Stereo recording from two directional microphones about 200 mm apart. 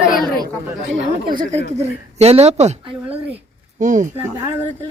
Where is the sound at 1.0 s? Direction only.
45° right (ahead or behind).